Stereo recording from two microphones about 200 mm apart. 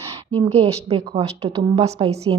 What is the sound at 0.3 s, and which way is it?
A woman's voice, 30° right (ahead or behind).